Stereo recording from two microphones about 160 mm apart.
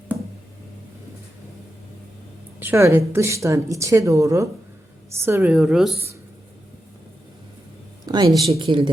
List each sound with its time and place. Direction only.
2.6 s a woman's voice: 15° right (ahead or behind)
8.0 s a sound: 25° right (ahead or behind)
8.5 s speech: 30° right (ahead or behind)